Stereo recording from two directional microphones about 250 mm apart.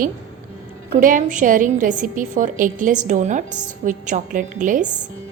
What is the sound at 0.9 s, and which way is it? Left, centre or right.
A woman's voice, right.